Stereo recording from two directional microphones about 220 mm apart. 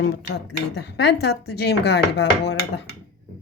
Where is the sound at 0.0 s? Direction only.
50° left (ahead or behind).